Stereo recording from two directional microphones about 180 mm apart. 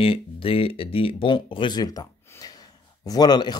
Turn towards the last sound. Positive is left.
turn(degrees=25)  # may be behind; listen again after turning